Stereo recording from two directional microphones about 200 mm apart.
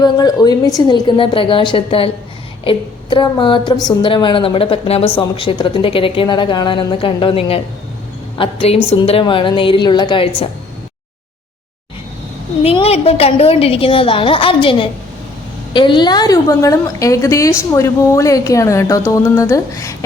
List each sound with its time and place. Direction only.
0.0 s a woman's voice: 20° left (ahead or behind)
12.6 s a woman's voice: 30° left (ahead or behind)